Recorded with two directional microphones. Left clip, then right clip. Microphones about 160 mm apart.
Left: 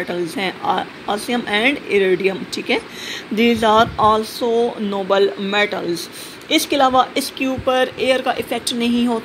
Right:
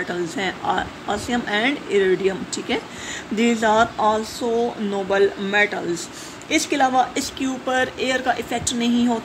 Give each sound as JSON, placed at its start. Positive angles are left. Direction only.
{"t": 0.1, "sound": "a woman's voice", "side_deg": 10}